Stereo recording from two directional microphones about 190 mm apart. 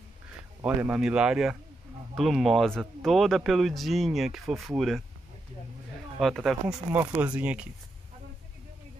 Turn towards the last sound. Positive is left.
turn(degrees=-5)  # may be behind; listen again after turning